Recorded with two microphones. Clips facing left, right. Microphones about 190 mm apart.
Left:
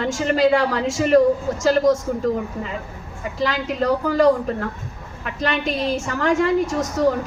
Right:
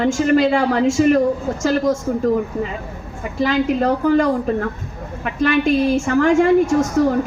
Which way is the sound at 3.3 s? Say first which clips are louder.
Right 5 dB; 55° right (ahead or behind).